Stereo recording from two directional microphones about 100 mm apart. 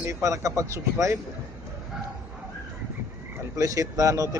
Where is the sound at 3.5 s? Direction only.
35° right (ahead or behind).